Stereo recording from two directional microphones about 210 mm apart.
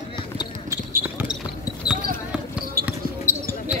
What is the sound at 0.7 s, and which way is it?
Basketball bounce, 10° right (ahead or behind).